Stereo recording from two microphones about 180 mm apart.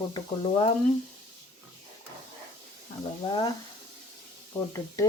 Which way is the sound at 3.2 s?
25° left (ahead or behind).